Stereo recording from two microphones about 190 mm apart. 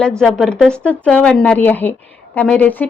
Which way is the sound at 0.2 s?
Centre (ahead or behind).